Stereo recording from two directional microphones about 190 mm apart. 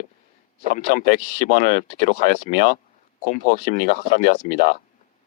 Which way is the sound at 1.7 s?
50° right (ahead or behind).